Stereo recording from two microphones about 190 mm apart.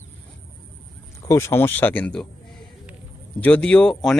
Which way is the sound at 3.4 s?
5° left (ahead or behind).